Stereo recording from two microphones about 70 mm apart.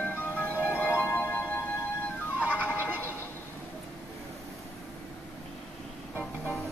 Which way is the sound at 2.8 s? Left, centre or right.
Left.